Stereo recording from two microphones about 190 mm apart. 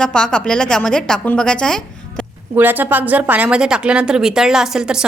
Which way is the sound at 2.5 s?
10° right (ahead or behind).